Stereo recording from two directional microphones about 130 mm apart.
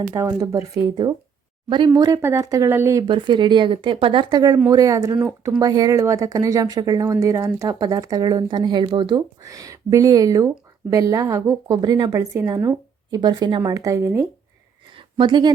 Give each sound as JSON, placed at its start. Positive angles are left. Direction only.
{"t": 0.1, "sound": "speech", "side_deg": -25}
{"t": 3.1, "sound": "speech", "side_deg": -35}
{"t": 9.4, "sound": "speech", "side_deg": -25}
{"t": 14.9, "sound": "a sound", "side_deg": -35}